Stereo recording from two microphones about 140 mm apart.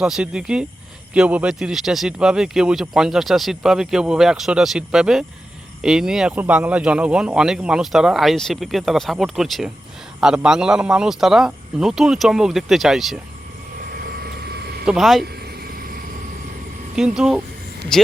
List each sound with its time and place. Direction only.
0.0 s speech: 5° right (ahead or behind)
13.7 s vehicle: 90° right
14.8 s speech: centre (ahead or behind)
16.9 s speech: 5° right (ahead or behind)